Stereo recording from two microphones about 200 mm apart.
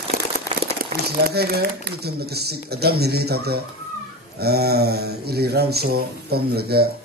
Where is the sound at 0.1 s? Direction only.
45° right (ahead or behind).